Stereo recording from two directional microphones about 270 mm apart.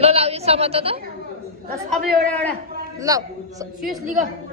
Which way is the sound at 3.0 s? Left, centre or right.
Centre.